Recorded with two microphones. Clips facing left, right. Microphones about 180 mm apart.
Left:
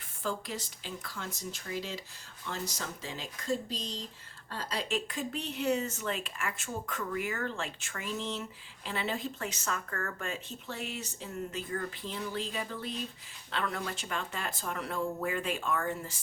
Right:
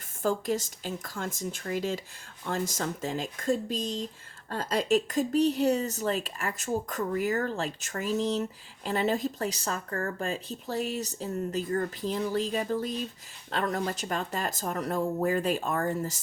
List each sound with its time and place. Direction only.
0.2 s speech: 45° right (ahead or behind)